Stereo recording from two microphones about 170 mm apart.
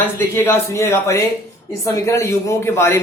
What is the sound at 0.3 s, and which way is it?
A woman's voice, 15° left (ahead or behind).